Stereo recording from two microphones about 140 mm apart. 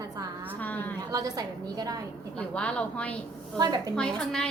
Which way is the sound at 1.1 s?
25° right (ahead or behind).